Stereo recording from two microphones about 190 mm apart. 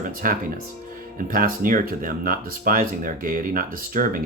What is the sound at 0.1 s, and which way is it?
Speech, 50° right (ahead or behind).